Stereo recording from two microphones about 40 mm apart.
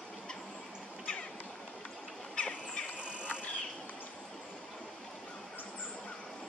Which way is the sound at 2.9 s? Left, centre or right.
Right.